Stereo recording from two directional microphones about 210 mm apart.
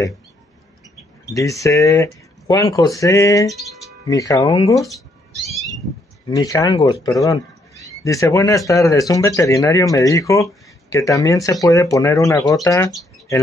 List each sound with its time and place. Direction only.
1.2 s speech: 15° left (ahead or behind)
4.8 s cat: centre (ahead or behind)
6.3 s speech: 15° left (ahead or behind)